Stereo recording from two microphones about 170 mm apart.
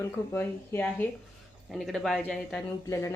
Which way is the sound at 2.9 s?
20° left (ahead or behind).